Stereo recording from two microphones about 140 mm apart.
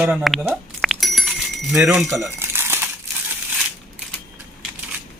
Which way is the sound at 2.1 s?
15° right (ahead or behind).